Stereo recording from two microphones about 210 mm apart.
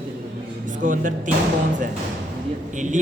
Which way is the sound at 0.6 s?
40° right (ahead or behind).